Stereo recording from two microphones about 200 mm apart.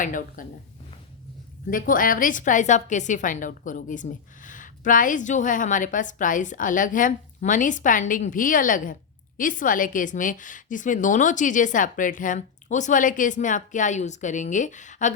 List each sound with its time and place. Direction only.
0.0 s a woman's voice: 40° left (ahead or behind)
1.7 s a woman's voice: 45° left (ahead or behind)